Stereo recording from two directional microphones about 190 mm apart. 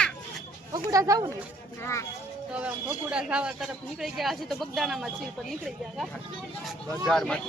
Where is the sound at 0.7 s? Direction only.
20° right (ahead or behind).